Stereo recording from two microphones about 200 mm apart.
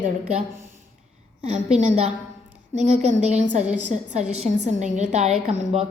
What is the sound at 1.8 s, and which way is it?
A woman's voice, 35° right (ahead or behind).